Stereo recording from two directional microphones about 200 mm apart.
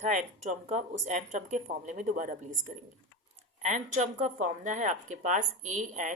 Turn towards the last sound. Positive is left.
turn(degrees=-40)  # may be behind; listen again after turning